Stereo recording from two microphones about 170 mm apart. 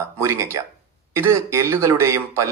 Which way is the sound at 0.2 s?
15° right (ahead or behind).